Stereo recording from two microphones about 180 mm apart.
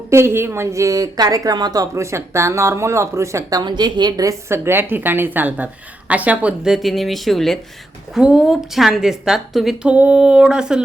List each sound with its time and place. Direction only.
0.1 s a woman's voice: 15° right (ahead or behind)